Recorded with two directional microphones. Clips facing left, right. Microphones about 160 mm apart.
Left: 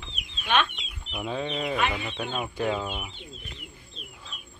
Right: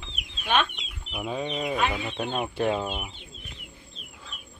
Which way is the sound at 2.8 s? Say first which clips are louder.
Right 2 dB; 10° right (ahead or behind).